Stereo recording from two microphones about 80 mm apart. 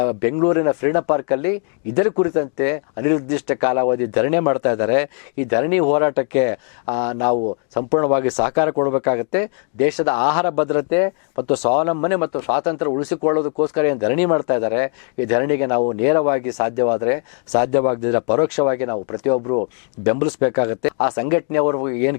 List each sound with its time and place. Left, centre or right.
0.0 s speech: centre